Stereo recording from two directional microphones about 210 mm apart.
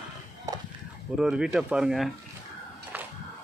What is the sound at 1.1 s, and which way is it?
Speech, 5° right (ahead or behind).